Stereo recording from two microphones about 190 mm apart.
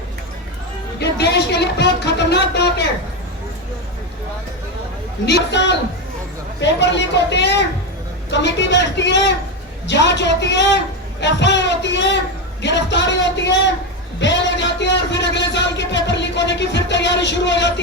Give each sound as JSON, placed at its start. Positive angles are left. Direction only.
{"t": 0.9, "sound": "speech", "side_deg": 60}
{"t": 5.2, "sound": "a man's voice", "side_deg": 65}